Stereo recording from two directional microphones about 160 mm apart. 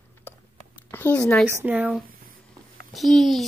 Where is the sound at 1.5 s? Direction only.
15° right (ahead or behind).